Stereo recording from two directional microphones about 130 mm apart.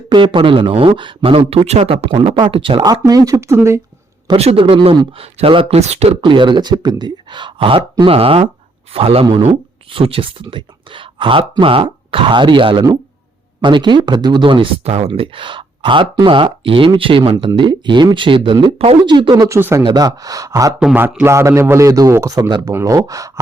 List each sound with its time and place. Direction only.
0.1 s speech: 40° right (ahead or behind)
2.8 s a man's voice: 30° right (ahead or behind)
4.4 s speech: 45° right (ahead or behind)
6.2 s speech: 40° right (ahead or behind)
19.5 s speech: 15° right (ahead or behind)
19.8 s a man's voice: 30° right (ahead or behind)
20.7 s speech: 10° right (ahead or behind)
21.2 s a man's voice: 20° right (ahead or behind)